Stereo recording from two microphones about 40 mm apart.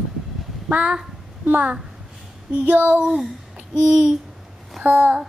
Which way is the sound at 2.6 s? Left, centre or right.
Right.